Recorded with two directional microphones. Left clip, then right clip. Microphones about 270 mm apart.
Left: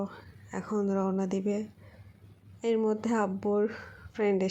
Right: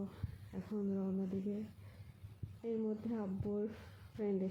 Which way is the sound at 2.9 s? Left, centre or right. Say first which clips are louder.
Left 14 dB; left.